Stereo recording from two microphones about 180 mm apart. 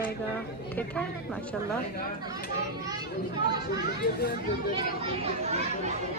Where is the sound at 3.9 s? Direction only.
60° left (ahead or behind).